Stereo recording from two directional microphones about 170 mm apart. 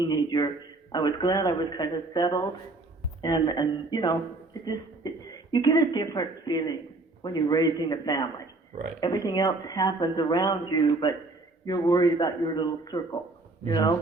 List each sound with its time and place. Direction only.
0.0 s a man's voice: 25° left (ahead or behind)